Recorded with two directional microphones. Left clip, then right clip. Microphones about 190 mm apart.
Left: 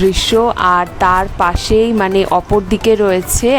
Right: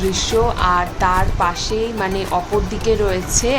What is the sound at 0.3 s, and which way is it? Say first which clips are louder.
Speech: left 3 dB; 45° left (ahead or behind).